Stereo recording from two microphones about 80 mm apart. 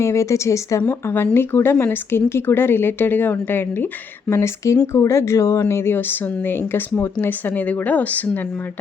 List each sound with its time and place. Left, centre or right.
0.0 s a woman's voice: left; by 8.4 s centre